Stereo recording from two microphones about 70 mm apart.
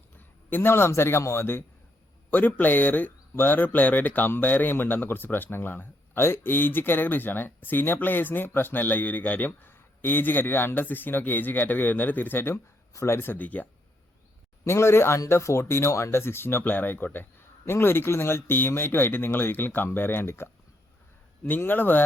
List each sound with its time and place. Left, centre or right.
0.2 s a man's voice: left
2.6 s speech: left
12.9 s speech: left
14.6 s speech: left